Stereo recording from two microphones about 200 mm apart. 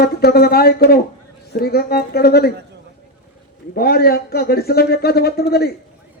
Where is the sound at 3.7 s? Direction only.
50° left (ahead or behind).